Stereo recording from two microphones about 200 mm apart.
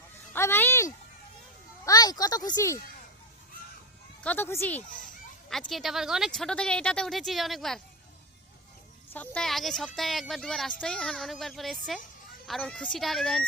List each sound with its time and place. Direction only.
0.3 s a sound: 10° left (ahead or behind)
1.8 s speech: 20° left (ahead or behind)
4.2 s speech: 10° left (ahead or behind)
9.1 s speech: 5° left (ahead or behind)